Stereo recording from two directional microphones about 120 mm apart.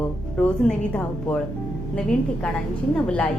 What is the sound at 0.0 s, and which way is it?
A woman's voice, 10° left (ahead or behind).